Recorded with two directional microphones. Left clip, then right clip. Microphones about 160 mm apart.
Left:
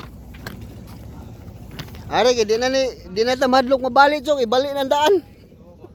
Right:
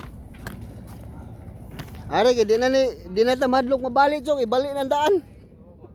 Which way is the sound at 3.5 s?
5° right (ahead or behind).